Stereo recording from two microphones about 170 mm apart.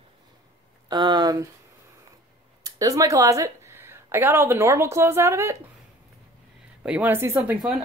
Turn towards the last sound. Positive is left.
turn(degrees=-10)  # may be behind; listen again after turning